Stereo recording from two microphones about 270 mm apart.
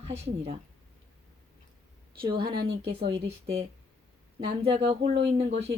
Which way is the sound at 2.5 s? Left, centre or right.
Right.